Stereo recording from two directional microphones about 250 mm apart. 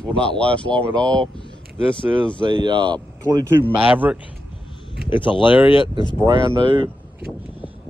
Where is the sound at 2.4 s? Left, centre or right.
Centre.